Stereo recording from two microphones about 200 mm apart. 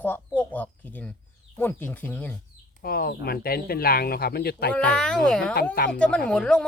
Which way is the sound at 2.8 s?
50° left (ahead or behind).